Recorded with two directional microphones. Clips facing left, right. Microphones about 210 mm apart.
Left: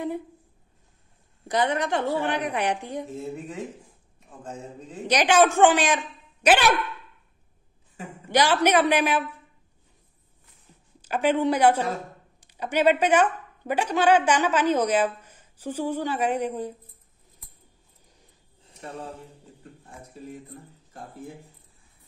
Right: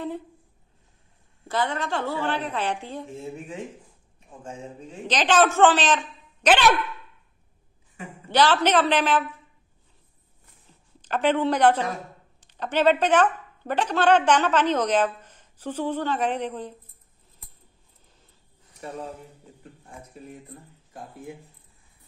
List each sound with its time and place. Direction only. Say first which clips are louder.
1.5 s a man's voice: left 3 dB; 20° left (ahead or behind)
5.0 s a man's voice: left 1 dB; 10° left (ahead or behind)
8.3 s a man's voice: even; 10° left (ahead or behind)
11.0 s a man's voice: even; 10° left (ahead or behind)